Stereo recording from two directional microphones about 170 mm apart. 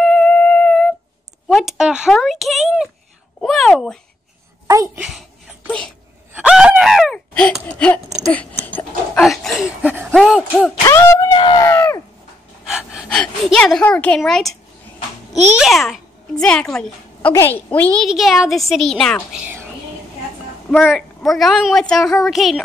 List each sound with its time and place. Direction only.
0.0 s music: 5° left (ahead or behind)
1.5 s a woman's voice: centre (ahead or behind)
4.6 s speech: 20° right (ahead or behind)
5.0 s a sound: 5° right (ahead or behind)
9.2 s a woman's voice: centre (ahead or behind)
10.9 s speech: 15° left (ahead or behind)
11.3 s speech: 30° left (ahead or behind)
11.6 s a sound: 15° left (ahead or behind)
12.6 s gasp: 5° right (ahead or behind)
13.2 s a woman's voice: 5° left (ahead or behind)
15.5 s a child's voice: centre (ahead or behind)
20.7 s a woman's voice: centre (ahead or behind)